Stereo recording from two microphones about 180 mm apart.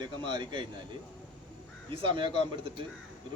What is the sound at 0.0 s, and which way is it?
Speech, 25° right (ahead or behind).